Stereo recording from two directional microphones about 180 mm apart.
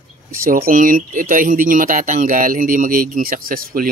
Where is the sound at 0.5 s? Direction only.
50° right (ahead or behind).